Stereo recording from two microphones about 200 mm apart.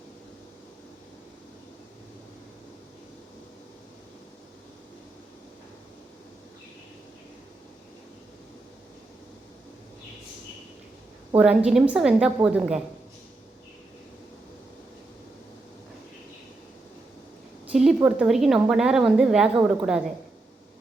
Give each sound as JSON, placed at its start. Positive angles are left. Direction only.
{"t": 11.3, "sound": "a woman's voice", "side_deg": -5}
{"t": 17.7, "sound": "a woman's voice", "side_deg": -5}